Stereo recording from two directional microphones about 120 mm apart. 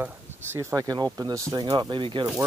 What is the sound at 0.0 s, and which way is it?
Speech, 20° right (ahead or behind).